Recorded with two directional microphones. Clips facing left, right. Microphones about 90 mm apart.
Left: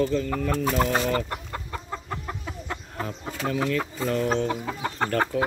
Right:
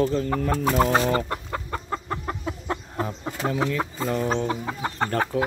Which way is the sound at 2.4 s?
25° right (ahead or behind).